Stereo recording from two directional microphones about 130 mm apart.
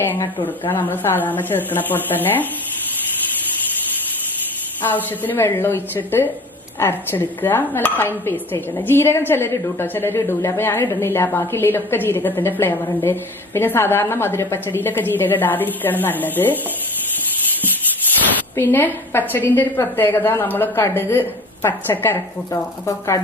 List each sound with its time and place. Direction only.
0.0 s dishes: 15° left (ahead or behind)
4.8 s dishes: 15° left (ahead or behind)
18.5 s dishes: 15° left (ahead or behind)